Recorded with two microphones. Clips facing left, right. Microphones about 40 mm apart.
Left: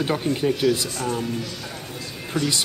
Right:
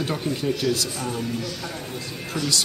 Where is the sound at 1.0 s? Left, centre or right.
Centre.